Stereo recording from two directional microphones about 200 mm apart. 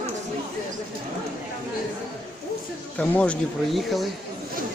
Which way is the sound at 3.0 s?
5° left (ahead or behind).